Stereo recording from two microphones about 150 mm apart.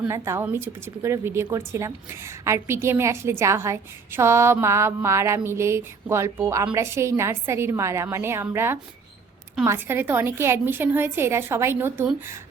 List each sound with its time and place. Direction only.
0.1 s speech: 15° right (ahead or behind)